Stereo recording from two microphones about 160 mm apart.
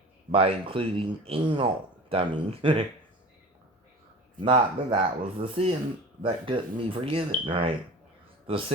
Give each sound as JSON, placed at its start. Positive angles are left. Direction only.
{"t": 0.3, "sound": "speech", "side_deg": -35}
{"t": 4.4, "sound": "speech", "side_deg": -30}